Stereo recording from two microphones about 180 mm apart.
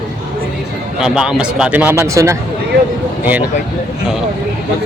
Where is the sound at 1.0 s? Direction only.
5° right (ahead or behind).